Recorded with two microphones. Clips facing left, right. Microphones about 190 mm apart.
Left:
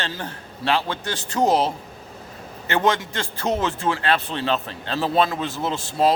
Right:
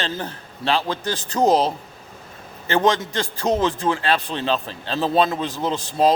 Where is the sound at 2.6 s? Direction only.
35° right (ahead or behind).